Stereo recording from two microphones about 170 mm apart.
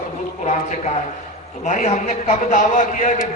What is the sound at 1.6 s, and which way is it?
A man's voice, 45° left (ahead or behind).